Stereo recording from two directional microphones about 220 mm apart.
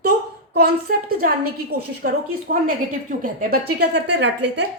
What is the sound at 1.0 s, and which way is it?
Speech, 40° right (ahead or behind).